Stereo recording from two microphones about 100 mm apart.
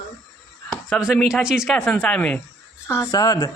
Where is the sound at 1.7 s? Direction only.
5° left (ahead or behind).